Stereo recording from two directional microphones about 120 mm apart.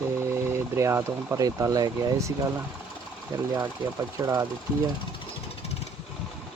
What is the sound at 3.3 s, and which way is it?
Speech, 30° right (ahead or behind).